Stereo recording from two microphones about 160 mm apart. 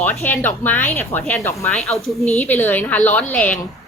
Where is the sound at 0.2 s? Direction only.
10° left (ahead or behind).